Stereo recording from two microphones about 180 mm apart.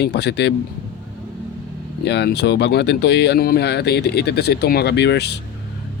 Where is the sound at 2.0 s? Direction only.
70° left (ahead or behind).